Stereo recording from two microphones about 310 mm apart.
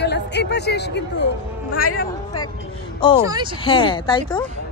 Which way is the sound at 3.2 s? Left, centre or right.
Centre.